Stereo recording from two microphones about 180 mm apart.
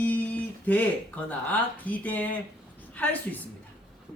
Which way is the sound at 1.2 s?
10° left (ahead or behind).